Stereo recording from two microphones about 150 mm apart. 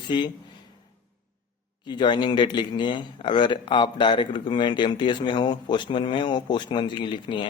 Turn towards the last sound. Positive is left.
turn(degrees=30)  # may be behind; listen again after turning